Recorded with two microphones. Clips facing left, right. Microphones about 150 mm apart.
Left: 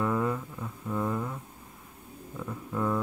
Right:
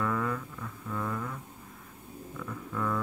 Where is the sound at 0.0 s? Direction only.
20° left (ahead or behind).